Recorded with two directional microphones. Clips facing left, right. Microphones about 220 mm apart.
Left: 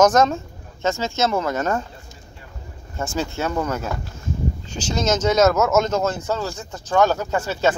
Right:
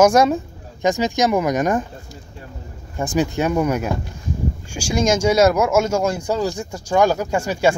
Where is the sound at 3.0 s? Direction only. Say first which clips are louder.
Right 5 dB; 15° right (ahead or behind).